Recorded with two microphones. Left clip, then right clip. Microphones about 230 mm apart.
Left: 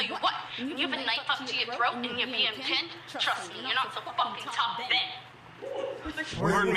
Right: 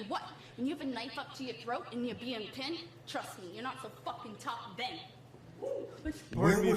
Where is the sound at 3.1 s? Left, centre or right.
Centre.